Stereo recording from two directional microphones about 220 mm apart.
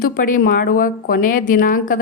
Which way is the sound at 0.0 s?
40° left (ahead or behind).